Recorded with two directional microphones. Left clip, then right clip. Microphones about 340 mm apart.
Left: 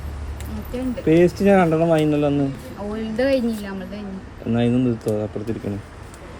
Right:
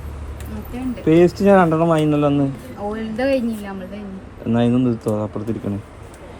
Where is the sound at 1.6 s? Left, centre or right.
Right.